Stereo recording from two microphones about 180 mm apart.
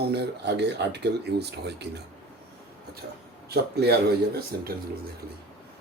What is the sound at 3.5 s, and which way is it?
Speech, 65° right (ahead or behind).